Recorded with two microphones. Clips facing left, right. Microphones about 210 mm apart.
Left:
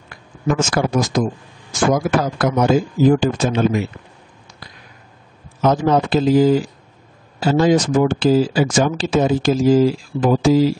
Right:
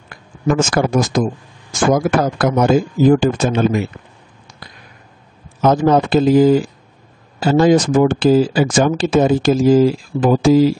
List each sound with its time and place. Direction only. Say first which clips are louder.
0.1 s a man's voice: right 3 dB; 50° right (ahead or behind)
5.6 s speech: right 3 dB; 50° right (ahead or behind)